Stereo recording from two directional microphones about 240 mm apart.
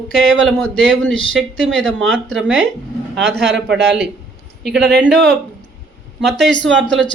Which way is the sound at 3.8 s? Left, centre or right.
Right.